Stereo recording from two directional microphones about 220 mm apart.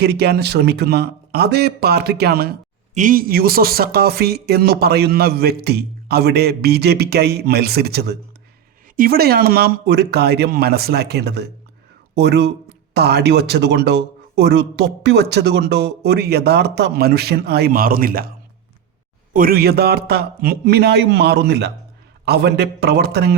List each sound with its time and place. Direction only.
0.0 s speech: 50° right (ahead or behind)
19.3 s speech: 40° right (ahead or behind)